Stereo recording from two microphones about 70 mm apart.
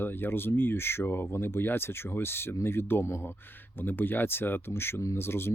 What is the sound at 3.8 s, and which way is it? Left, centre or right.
Speech, left.